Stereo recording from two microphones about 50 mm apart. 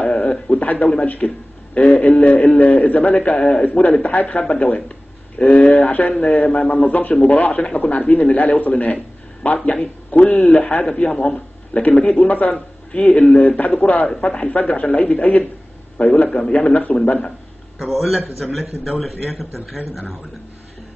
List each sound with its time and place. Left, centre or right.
0.0 s a sound: centre
1.0 s a man's voice: left
12.3 s a man's voice: left
17.7 s a man's voice: centre